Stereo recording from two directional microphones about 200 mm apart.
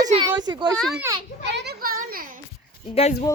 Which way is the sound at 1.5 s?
55° right (ahead or behind).